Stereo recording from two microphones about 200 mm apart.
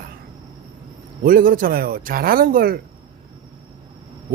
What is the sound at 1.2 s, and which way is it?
Speech, 45° right (ahead or behind).